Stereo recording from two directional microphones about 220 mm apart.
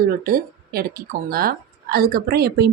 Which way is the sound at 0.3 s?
45° right (ahead or behind).